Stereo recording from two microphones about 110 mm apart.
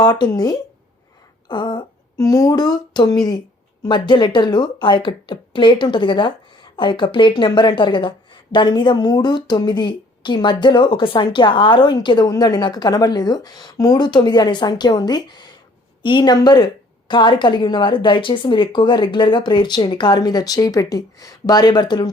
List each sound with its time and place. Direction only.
0.0 s a woman's voice: 35° left (ahead or behind)
2.1 s a woman's voice: 30° left (ahead or behind)